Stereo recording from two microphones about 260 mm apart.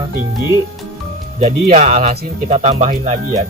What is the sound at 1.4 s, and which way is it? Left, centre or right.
Speech, right.